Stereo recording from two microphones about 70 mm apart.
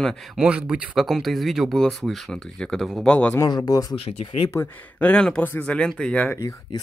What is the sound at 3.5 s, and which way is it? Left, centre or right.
Speech, left.